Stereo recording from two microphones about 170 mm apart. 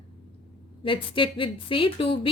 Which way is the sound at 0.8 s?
30° left (ahead or behind).